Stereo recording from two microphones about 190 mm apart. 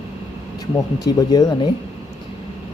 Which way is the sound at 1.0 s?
20° left (ahead or behind).